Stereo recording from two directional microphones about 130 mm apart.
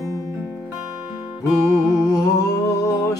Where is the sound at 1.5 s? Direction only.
25° left (ahead or behind).